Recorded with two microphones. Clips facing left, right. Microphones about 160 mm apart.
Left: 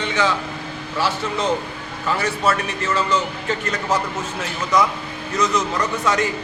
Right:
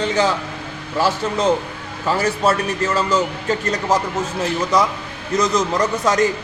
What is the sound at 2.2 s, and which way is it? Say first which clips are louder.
Speech: right 3 dB; 40° right (ahead or behind).